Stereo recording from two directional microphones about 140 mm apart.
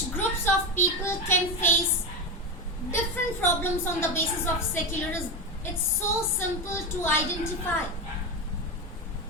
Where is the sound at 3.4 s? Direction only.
15° left (ahead or behind).